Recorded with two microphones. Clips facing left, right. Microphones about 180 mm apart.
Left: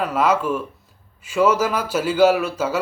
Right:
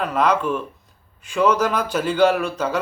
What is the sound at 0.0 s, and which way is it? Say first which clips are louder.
A man's voice: even; 5° left (ahead or behind).